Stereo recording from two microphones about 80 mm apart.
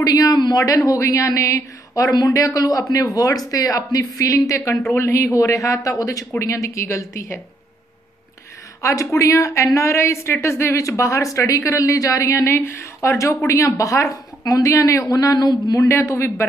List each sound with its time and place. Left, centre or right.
0.0 s a woman's voice: left
8.8 s a woman's voice: left